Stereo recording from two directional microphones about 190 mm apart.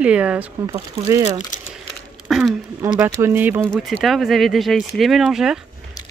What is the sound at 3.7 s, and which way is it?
Speech, centre (ahead or behind).